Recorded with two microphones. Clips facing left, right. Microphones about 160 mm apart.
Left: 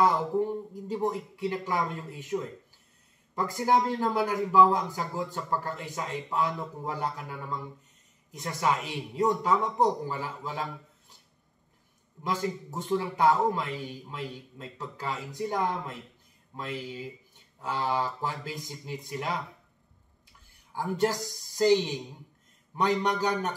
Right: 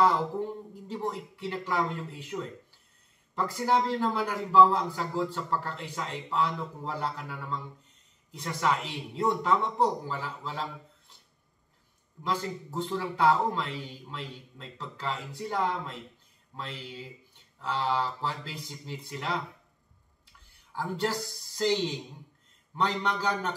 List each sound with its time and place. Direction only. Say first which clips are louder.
0.0 s a man's voice: left 1 dB; 15° left (ahead or behind)
3.3 s a man's voice: left 1 dB; 15° left (ahead or behind)
12.2 s a man's voice: left 1 dB; 15° left (ahead or behind)
20.7 s a man's voice: left 3 dB; 15° left (ahead or behind)